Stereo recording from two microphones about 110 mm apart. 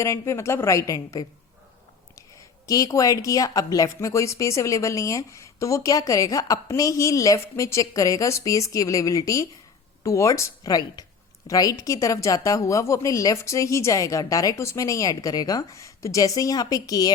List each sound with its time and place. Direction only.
0.0 s speech: 25° left (ahead or behind)
2.6 s a woman's voice: 30° left (ahead or behind)